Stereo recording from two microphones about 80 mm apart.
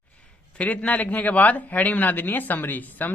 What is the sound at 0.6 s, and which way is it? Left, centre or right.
Speech, centre.